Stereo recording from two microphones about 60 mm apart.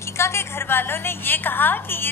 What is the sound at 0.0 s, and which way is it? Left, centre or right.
A woman's voice, left.